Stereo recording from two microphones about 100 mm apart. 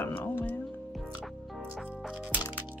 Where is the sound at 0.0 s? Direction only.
20° left (ahead or behind).